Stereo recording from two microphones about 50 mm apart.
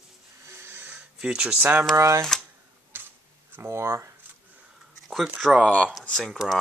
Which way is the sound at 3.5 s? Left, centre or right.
Right.